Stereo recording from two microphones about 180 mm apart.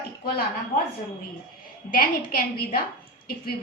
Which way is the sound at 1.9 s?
50° left (ahead or behind).